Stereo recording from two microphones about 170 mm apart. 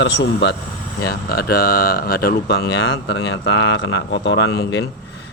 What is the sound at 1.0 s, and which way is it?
Speech, 65° left (ahead or behind).